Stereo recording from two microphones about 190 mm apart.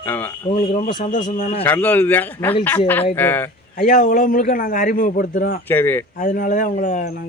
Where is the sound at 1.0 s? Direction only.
45° left (ahead or behind).